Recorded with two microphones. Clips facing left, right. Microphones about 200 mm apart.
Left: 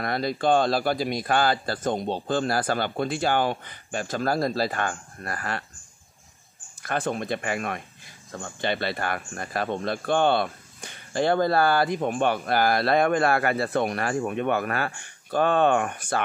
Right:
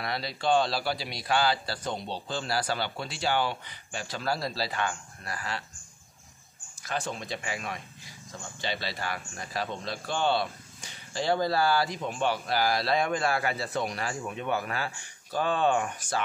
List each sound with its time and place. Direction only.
0.0 s a man's voice: 50° left (ahead or behind)
6.8 s speech: 55° left (ahead or behind)